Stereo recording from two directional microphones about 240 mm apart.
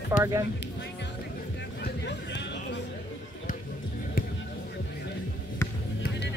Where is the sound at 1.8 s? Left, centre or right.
Left.